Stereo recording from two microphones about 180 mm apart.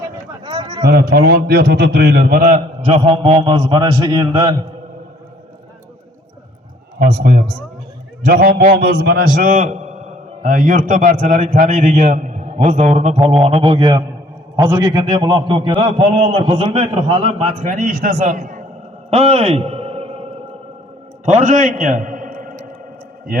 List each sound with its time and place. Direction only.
0.4 s a sound: 25° right (ahead or behind)
0.9 s a man's voice: 60° right (ahead or behind); by 3.0 s 45° right (ahead or behind)
3.0 s a man's voice: 30° right (ahead or behind)
7.0 s a man's voice: 55° right (ahead or behind)
9.3 s a man's voice: 45° right (ahead or behind)
19.1 s a sound: 35° right (ahead or behind)
21.3 s a man's voice: 40° right (ahead or behind)